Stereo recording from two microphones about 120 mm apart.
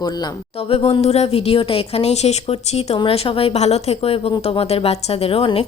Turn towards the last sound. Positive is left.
turn(degrees=55)  # may be behind; listen again after turning